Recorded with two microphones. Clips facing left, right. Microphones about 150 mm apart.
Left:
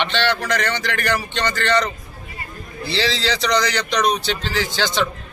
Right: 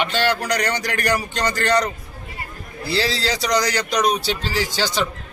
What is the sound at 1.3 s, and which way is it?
Speech, 40° right (ahead or behind).